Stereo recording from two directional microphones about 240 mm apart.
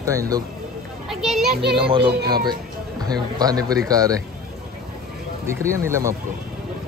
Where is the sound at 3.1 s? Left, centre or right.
Centre.